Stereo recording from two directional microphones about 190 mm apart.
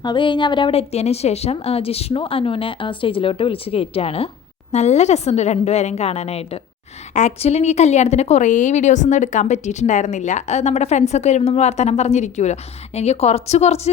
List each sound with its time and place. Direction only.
0.0 s a woman's voice: 25° left (ahead or behind)